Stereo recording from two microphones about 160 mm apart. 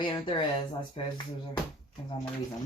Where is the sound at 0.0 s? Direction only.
30° left (ahead or behind).